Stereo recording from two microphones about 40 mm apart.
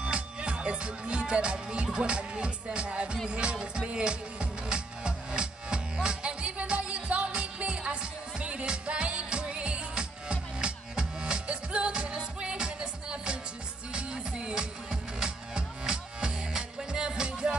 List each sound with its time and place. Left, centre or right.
0.0 s music: right
2.0 s speech: right
3.3 s music: right